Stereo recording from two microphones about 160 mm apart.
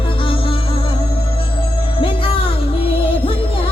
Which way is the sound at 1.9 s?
35° left (ahead or behind).